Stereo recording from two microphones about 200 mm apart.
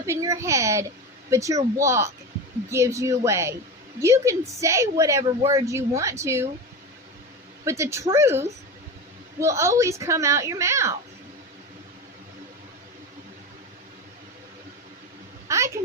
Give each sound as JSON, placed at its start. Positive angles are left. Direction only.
{"t": 0.0, "sound": "a woman's voice", "side_deg": -15}
{"t": 7.6, "sound": "a woman's voice", "side_deg": -15}
{"t": 15.4, "sound": "a sound", "side_deg": -15}